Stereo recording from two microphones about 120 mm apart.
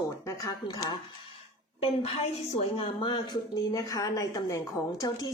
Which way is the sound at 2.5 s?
55° left (ahead or behind).